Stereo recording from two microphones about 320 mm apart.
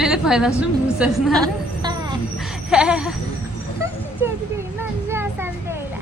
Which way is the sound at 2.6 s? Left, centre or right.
Centre.